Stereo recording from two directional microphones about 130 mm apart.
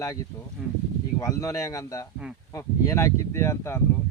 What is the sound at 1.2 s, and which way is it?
Speech, 25° left (ahead or behind).